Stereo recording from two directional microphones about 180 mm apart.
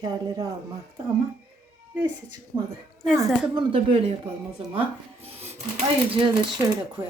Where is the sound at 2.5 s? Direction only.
25° right (ahead or behind).